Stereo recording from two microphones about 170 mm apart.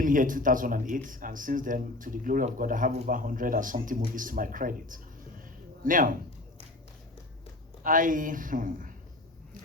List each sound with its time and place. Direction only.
0.0 s speech: 50° right (ahead or behind)
7.9 s speech: 50° right (ahead or behind)